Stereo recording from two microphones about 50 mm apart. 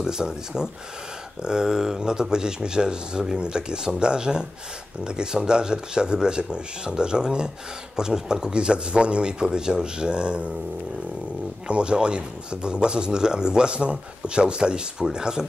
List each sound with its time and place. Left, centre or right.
0.0 s speech: centre
11.6 s speech: centre